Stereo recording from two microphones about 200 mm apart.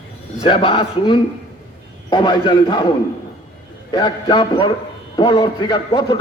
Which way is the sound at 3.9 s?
20° left (ahead or behind).